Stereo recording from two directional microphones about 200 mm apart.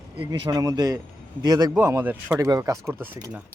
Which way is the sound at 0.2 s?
25° right (ahead or behind).